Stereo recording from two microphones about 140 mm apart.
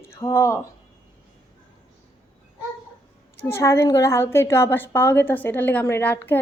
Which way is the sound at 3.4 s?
20° left (ahead or behind).